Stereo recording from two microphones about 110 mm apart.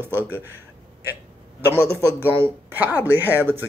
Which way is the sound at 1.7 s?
20° right (ahead or behind).